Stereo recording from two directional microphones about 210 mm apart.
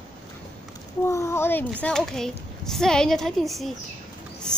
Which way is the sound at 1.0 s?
15° left (ahead or behind).